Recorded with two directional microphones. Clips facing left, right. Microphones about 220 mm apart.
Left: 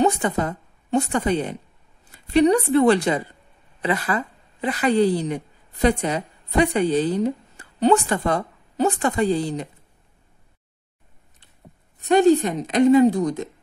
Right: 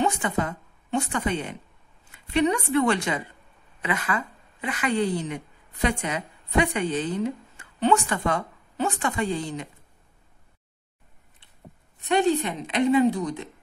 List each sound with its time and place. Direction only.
0.0 s a woman's voice: 40° left (ahead or behind)
12.0 s a woman's voice: 40° left (ahead or behind)